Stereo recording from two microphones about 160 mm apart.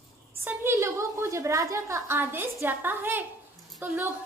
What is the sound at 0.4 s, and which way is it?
A woman's voice, 15° right (ahead or behind).